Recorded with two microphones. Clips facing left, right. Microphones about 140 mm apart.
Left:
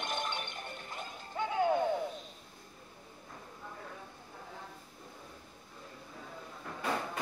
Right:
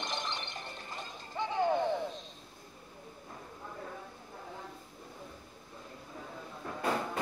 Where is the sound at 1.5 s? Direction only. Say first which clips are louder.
Even; 10° left (ahead or behind).